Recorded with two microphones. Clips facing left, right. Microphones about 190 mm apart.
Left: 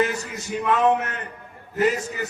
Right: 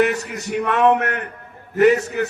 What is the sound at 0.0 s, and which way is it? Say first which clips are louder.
A man's voice: right 5 dB; 70° right (ahead or behind).